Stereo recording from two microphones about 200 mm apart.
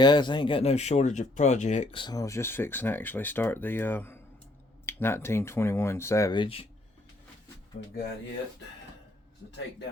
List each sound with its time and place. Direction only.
0.0 s speech: 20° left (ahead or behind)